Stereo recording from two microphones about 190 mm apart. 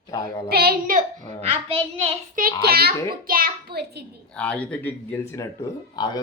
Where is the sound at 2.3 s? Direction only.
50° right (ahead or behind).